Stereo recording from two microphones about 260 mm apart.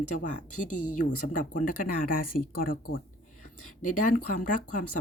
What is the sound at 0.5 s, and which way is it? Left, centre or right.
Speech, left.